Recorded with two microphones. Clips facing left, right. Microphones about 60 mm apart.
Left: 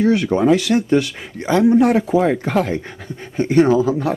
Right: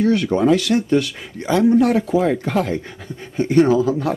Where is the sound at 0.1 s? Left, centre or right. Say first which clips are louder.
Left 1 dB; centre.